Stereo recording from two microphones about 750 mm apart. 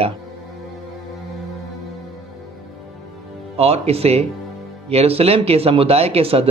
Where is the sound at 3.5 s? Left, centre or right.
Centre.